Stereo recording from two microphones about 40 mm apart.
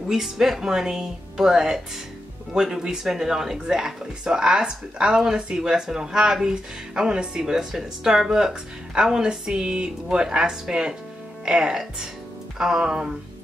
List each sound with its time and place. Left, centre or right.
0.1 s speech: centre